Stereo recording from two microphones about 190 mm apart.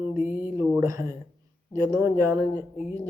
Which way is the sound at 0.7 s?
15° right (ahead or behind).